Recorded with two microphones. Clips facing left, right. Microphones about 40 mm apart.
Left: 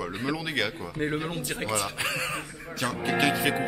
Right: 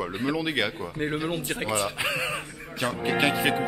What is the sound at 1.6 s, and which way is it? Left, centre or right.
A man's voice, centre.